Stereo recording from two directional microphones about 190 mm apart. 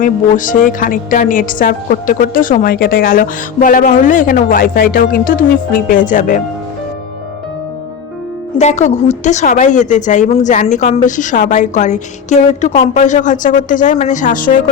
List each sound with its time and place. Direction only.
0.0 s a woman's voice: 45° left (ahead or behind)
8.5 s a woman's voice: 35° left (ahead or behind)